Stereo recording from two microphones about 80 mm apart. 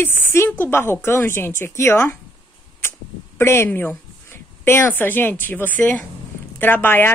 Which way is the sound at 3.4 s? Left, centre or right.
Left.